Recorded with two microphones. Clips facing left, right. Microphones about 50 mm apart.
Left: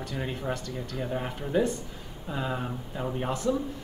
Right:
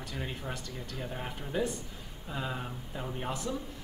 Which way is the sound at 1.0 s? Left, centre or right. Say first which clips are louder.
Left 7 dB; centre.